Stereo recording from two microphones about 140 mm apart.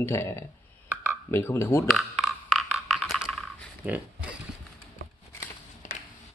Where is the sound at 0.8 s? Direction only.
10° right (ahead or behind).